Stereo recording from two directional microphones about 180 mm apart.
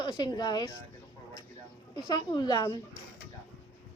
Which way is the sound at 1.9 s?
25° left (ahead or behind).